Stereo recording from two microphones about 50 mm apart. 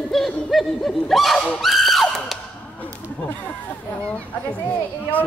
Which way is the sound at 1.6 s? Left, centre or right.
Centre.